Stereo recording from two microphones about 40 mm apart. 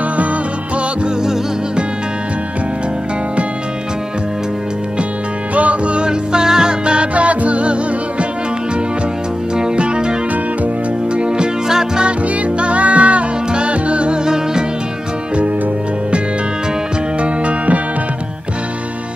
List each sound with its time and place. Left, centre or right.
5.5 s music: right
9.6 s music: right
11.1 s music: right
12.5 s music: right
17.2 s music: right